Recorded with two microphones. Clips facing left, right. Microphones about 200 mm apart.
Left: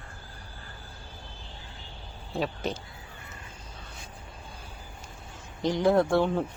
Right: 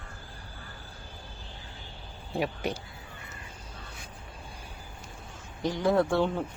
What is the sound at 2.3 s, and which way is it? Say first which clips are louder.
Speech: even; 10° right (ahead or behind).